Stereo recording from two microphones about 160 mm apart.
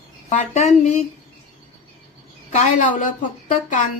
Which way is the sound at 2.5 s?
50° left (ahead or behind).